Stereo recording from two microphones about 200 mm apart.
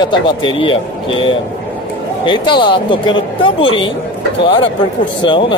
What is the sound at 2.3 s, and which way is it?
Speech, 25° left (ahead or behind).